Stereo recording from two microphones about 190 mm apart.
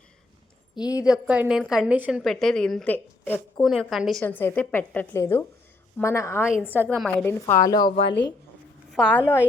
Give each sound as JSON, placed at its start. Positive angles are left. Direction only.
{"t": 0.8, "sound": "a woman's voice", "side_deg": 20}
{"t": 1.0, "sound": "a woman's voice", "side_deg": -5}
{"t": 3.7, "sound": "a woman's voice", "side_deg": 0}
{"t": 6.5, "sound": "a woman's voice", "side_deg": -5}
{"t": 7.0, "sound": "a woman's voice", "side_deg": 10}
{"t": 8.9, "sound": "a woman's voice", "side_deg": 5}